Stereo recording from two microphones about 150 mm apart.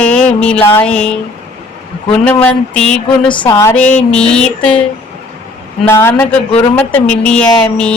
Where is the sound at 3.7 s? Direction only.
10° left (ahead or behind).